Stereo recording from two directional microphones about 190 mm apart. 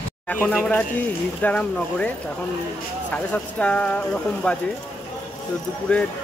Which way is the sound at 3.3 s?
5° left (ahead or behind).